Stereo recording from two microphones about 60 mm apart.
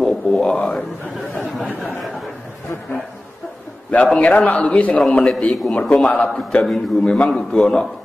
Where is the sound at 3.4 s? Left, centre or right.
Centre.